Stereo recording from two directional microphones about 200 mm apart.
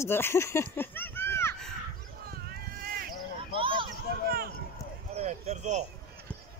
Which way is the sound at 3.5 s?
25° right (ahead or behind).